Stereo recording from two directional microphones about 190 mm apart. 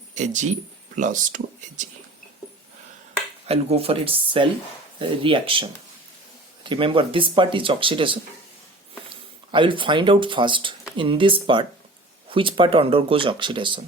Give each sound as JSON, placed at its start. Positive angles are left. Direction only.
{"t": 0.1, "sound": "speech", "side_deg": -40}
{"t": 3.4, "sound": "speech", "side_deg": -30}
{"t": 6.7, "sound": "speech", "side_deg": -25}